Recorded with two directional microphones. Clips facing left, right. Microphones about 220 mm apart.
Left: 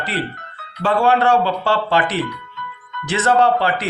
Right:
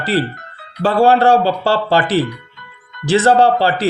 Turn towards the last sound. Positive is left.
turn(degrees=-30)  # may be behind; listen again after turning